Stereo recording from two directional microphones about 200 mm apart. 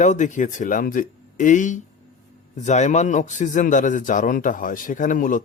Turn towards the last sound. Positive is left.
turn(degrees=40)  # may be behind; listen again after turning